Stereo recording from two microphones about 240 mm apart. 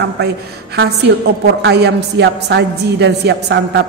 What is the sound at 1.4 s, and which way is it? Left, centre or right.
A woman's voice, right.